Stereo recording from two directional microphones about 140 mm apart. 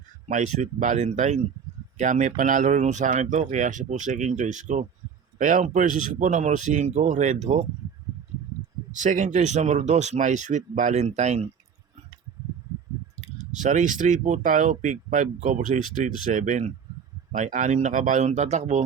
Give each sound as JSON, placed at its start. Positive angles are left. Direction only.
{"t": 0.3, "sound": "speech", "side_deg": -60}
{"t": 5.4, "sound": "speech", "side_deg": -70}
{"t": 8.9, "sound": "speech", "side_deg": -65}
{"t": 13.6, "sound": "speech", "side_deg": -65}